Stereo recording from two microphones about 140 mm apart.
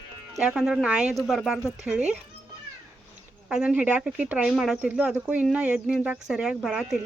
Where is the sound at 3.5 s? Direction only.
5° right (ahead or behind).